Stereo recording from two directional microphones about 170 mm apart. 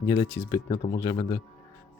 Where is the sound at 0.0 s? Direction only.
25° left (ahead or behind).